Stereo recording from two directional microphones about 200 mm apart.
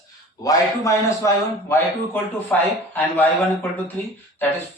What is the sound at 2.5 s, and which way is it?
Speech, 10° left (ahead or behind).